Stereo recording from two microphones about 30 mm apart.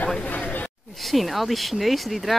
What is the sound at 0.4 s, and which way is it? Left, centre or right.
Chatter, left.